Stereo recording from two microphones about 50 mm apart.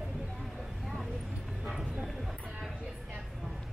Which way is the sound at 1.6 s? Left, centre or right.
Centre.